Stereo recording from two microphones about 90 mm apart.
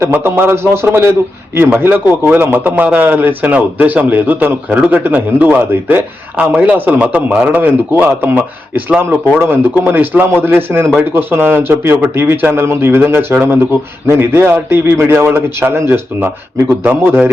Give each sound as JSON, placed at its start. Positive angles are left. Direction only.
{"t": 0.1, "sound": "a man's voice", "side_deg": -25}